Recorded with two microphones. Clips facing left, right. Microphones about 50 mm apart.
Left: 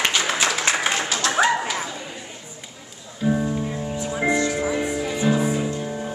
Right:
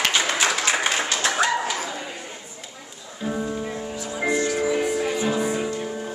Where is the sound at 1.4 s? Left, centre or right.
Centre.